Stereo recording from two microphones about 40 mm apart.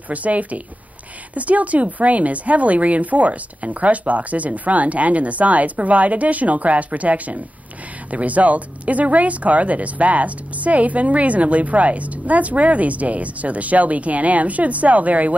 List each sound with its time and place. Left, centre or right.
0.1 s speech: right